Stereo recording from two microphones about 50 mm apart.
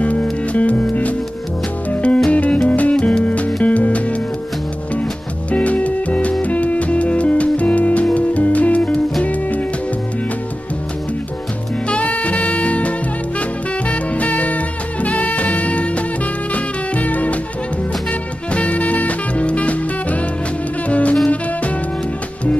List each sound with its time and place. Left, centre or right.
0.0 s music: left
5.5 s music: left
11.9 s music: left
18.5 s music: left